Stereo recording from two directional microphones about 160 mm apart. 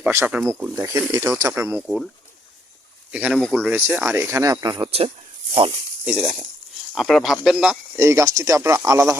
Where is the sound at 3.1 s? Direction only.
10° right (ahead or behind); by 5.0 s 35° right (ahead or behind).